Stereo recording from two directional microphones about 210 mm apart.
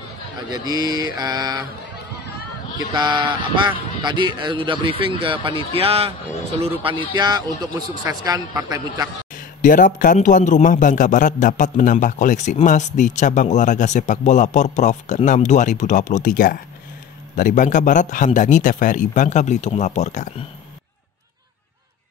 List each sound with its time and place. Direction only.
0.5 s a man's voice: 20° right (ahead or behind)
2.9 s a man's voice: 20° right (ahead or behind)
9.6 s a man's voice: 40° left (ahead or behind)